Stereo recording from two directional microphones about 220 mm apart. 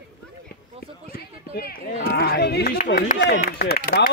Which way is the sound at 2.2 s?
45° left (ahead or behind).